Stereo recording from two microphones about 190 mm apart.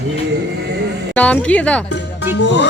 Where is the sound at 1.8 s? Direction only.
70° left (ahead or behind).